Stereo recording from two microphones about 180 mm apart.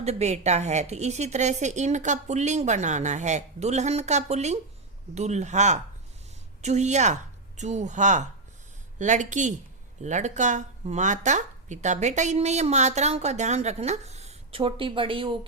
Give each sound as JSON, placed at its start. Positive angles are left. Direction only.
{"t": 0.0, "sound": "a woman's voice", "side_deg": -35}